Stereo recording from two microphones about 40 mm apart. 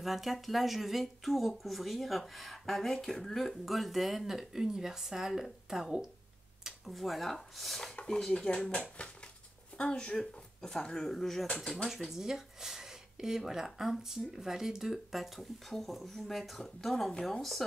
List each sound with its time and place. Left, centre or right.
0.0 s speech: centre
6.9 s speech: centre
7.9 s dishes: left
8.2 s speech: centre
9.8 s speech: left; by 11.9 s centre
12.1 s speech: centre